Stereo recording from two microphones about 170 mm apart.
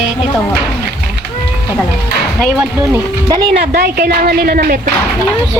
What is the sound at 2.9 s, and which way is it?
Speech, 25° right (ahead or behind).